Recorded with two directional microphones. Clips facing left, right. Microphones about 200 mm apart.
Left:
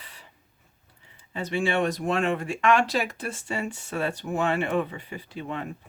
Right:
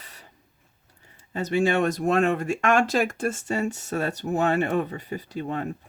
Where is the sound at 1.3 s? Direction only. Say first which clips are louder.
Right 4 dB; 40° right (ahead or behind).